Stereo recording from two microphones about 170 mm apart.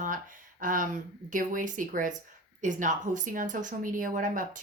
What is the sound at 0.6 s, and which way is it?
A woman's voice, 50° right (ahead or behind).